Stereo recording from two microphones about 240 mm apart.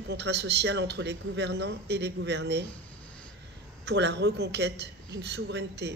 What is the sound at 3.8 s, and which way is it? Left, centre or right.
A man's voice, right.